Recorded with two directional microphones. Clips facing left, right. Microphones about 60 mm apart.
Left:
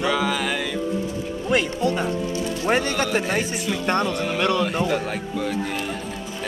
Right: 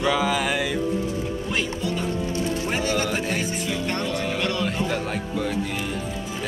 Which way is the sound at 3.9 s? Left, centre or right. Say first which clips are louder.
Left 7 dB; left.